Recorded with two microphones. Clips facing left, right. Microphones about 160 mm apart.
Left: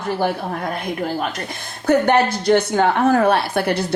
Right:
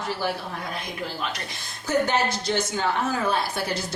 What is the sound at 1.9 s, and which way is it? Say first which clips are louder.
A woman's voice: left 8 dB; 60° left (ahead or behind).